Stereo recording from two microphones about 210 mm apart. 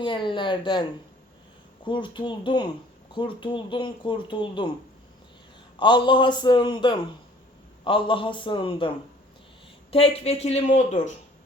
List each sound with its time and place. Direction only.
0.0 s speech: 25° left (ahead or behind)
5.8 s speech: 20° left (ahead or behind)
9.9 s speech: 25° left (ahead or behind)